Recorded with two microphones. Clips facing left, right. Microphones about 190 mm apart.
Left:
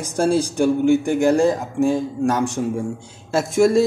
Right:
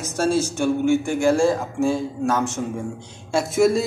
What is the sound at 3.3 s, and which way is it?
Speech, centre (ahead or behind).